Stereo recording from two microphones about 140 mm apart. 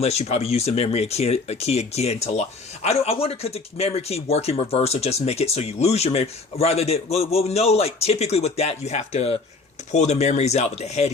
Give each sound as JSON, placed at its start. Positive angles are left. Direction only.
{"t": 0.0, "sound": "speech", "side_deg": 50}